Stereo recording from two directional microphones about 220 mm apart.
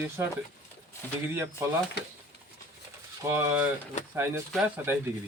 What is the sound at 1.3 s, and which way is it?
Speech, 10° right (ahead or behind).